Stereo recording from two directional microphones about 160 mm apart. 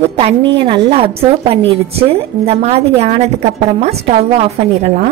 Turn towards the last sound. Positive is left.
turn(degrees=-45)  # may be behind; listen again after turning